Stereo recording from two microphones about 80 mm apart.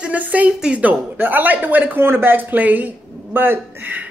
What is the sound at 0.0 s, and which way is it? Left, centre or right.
Speech, centre.